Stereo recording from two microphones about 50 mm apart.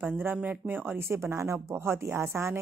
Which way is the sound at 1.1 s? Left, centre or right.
Right.